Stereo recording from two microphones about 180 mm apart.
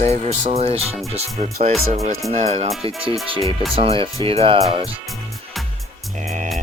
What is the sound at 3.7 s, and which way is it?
Speech, 30° right (ahead or behind).